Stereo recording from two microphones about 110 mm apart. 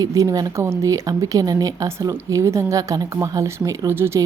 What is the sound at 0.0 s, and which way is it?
Speech, 30° right (ahead or behind).